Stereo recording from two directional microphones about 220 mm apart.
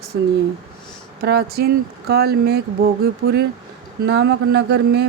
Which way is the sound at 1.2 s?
45° right (ahead or behind).